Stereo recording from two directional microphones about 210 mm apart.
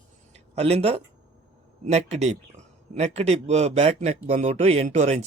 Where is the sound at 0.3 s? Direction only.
30° right (ahead or behind).